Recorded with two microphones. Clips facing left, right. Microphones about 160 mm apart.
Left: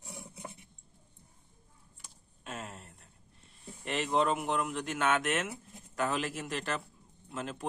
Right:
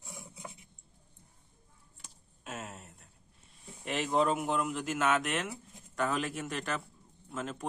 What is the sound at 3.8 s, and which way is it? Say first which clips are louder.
Speech: even; centre (ahead or behind).